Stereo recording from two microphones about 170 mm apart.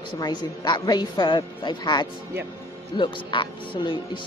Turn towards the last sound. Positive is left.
turn(degrees=30)  # may be behind; listen again after turning